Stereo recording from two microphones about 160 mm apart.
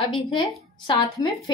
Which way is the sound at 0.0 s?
30° left (ahead or behind).